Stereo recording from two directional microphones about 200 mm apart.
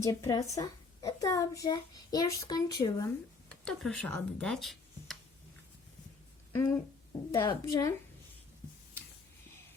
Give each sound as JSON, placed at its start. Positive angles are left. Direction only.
{"t": 0.0, "sound": "a child's voice", "side_deg": 15}
{"t": 3.6, "sound": "speech", "side_deg": 5}
{"t": 6.5, "sound": "a child's voice", "side_deg": 15}